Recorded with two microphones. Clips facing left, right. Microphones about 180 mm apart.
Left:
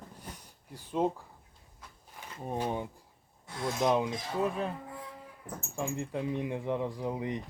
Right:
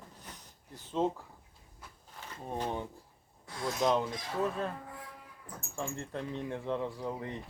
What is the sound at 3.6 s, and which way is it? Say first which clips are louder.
Speech: left 1 dB; 25° left (ahead or behind).